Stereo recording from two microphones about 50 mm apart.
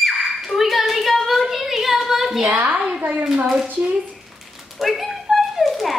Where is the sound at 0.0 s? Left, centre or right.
Centre.